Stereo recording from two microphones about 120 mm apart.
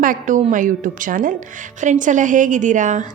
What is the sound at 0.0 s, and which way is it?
A woman's voice, 90° right.